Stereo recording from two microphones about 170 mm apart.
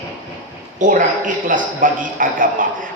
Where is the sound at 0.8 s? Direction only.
50° right (ahead or behind).